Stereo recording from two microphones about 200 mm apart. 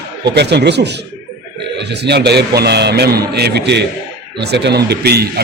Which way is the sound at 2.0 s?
55° right (ahead or behind).